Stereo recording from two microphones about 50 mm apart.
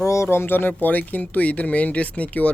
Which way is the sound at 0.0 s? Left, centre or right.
Left.